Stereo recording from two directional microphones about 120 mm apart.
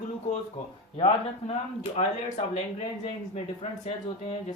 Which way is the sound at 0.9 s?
50° left (ahead or behind).